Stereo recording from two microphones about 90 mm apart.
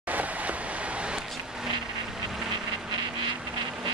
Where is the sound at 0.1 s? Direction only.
15° right (ahead or behind).